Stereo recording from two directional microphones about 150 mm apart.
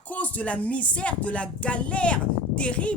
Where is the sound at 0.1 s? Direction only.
10° left (ahead or behind).